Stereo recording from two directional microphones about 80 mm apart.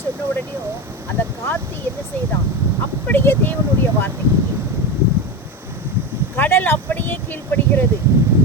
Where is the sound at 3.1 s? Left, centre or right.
Left.